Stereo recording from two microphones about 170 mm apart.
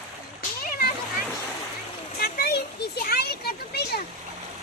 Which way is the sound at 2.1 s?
65° left (ahead or behind).